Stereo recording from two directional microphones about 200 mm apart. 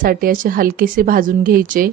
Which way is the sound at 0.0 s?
45° right (ahead or behind).